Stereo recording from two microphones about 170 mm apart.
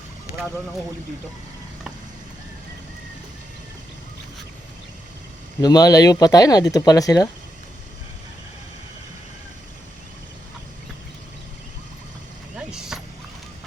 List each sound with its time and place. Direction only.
5.6 s speech: 20° left (ahead or behind)
12.5 s vehicle: 5° right (ahead or behind)